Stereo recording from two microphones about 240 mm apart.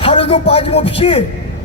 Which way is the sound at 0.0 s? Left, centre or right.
Left.